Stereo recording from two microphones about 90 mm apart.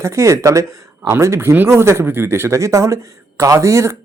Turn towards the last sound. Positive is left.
turn(degrees=-35)  # may be behind; listen again after turning